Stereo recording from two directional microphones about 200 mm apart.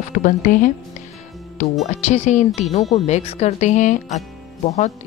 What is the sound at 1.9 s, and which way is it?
A woman's voice, 35° left (ahead or behind).